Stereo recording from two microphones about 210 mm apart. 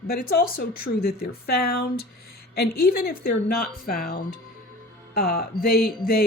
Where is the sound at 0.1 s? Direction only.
45° left (ahead or behind).